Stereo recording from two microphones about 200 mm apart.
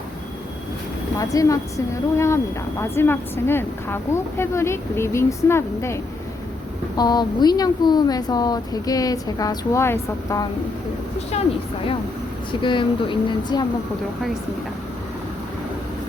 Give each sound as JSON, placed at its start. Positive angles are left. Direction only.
{"t": 1.2, "sound": "speech", "side_deg": 15}
{"t": 12.6, "sound": "speech", "side_deg": 25}